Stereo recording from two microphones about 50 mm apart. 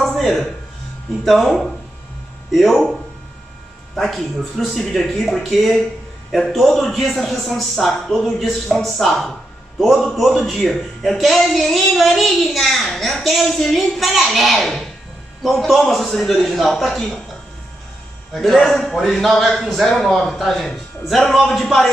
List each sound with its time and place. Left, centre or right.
0.0 s a sound: centre
1.2 s a man's voice: centre
2.5 s a man's voice: centre
18.3 s a man's voice: centre